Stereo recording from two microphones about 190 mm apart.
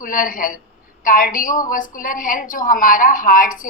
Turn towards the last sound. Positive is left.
turn(degrees=45)  # may be behind; listen again after turning